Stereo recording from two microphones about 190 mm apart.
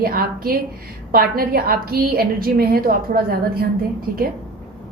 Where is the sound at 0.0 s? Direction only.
50° right (ahead or behind).